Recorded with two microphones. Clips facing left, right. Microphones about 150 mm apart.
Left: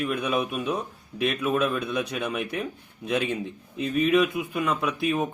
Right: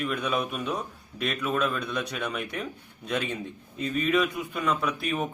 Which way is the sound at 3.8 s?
15° left (ahead or behind).